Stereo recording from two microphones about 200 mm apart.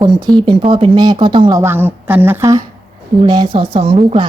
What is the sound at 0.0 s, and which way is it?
A woman's voice, 20° right (ahead or behind).